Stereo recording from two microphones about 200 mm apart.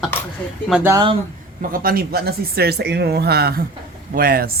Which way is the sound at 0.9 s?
25° right (ahead or behind).